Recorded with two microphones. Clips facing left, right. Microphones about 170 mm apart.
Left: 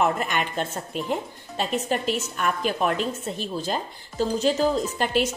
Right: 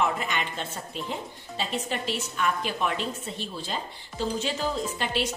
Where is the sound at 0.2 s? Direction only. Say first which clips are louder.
Left 5 dB; 45° left (ahead or behind).